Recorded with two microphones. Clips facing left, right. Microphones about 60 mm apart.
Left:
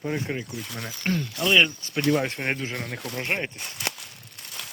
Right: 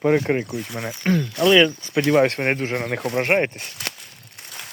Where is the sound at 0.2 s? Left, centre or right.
Right.